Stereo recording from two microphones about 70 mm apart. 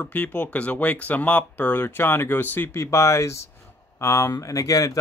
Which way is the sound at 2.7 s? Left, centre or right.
Left.